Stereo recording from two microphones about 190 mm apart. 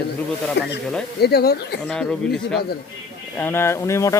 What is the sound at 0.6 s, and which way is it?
Speech, 65° left (ahead or behind).